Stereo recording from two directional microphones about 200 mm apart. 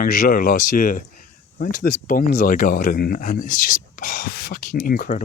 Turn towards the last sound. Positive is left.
turn(degrees=45)  # may be behind; listen again after turning